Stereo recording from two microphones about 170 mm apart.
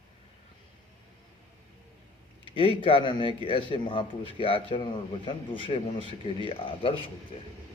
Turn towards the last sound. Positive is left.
turn(degrees=30)  # may be behind; listen again after turning